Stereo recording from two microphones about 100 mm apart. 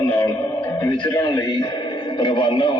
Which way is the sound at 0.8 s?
55° left (ahead or behind).